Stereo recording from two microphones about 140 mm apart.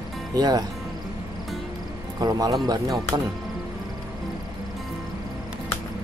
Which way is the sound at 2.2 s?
25° right (ahead or behind).